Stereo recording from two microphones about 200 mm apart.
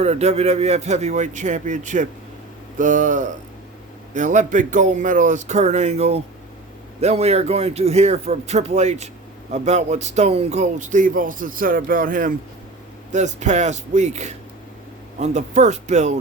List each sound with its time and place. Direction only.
0.0 s speech: 35° right (ahead or behind)